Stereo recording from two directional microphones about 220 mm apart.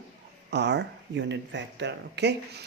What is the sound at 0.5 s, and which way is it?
Speech, 50° right (ahead or behind).